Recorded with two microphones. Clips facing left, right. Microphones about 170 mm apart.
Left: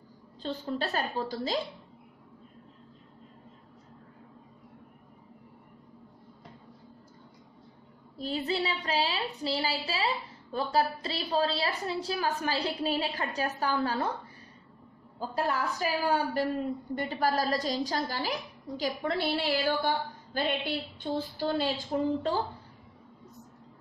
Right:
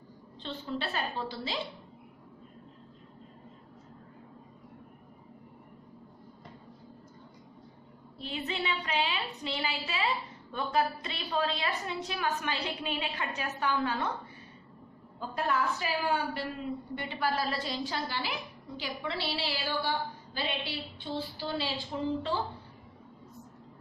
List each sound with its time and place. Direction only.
0.4 s a woman's voice: 40° left (ahead or behind)
8.2 s a woman's voice: 35° left (ahead or behind)
15.1 s a woman's voice: 35° left (ahead or behind)